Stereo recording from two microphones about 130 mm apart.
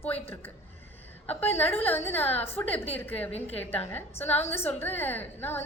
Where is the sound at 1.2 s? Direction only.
50° left (ahead or behind).